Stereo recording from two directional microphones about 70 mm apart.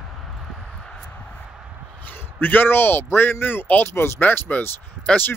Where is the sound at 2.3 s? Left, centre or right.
Left.